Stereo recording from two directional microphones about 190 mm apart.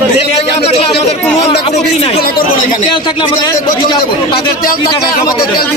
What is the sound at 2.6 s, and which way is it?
A man's voice, 25° left (ahead or behind).